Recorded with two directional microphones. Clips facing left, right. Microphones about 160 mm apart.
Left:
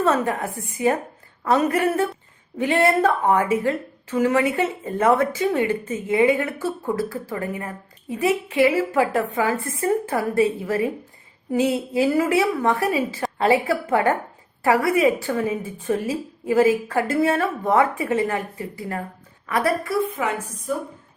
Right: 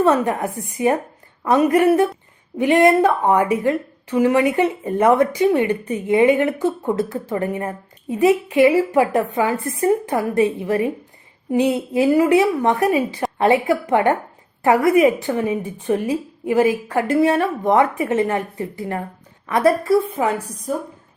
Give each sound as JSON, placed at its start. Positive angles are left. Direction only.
{"t": 0.0, "sound": "a woman's voice", "side_deg": -15}